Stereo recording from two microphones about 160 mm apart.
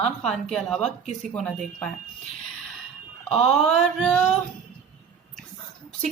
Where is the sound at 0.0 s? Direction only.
5° left (ahead or behind).